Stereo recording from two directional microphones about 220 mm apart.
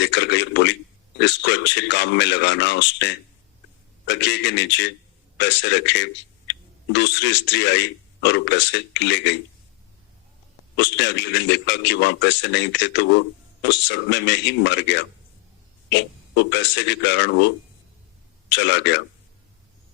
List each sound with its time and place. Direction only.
0.0 s a man's voice: 50° left (ahead or behind)
10.8 s a man's voice: 55° left (ahead or behind)
18.5 s a man's voice: 55° left (ahead or behind)